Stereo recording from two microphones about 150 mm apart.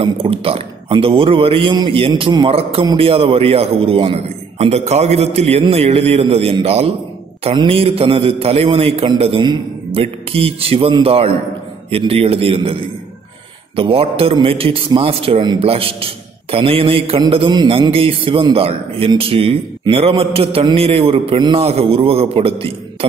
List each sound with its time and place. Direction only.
0.0 s a man's voice: 40° right (ahead or behind)
13.7 s a man's voice: 40° right (ahead or behind)